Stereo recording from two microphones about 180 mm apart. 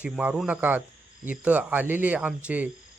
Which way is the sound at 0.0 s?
5° right (ahead or behind).